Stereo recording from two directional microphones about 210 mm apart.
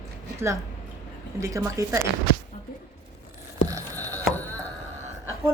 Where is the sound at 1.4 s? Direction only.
15° right (ahead or behind).